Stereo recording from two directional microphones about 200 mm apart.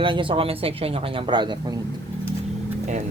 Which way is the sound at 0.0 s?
25° right (ahead or behind).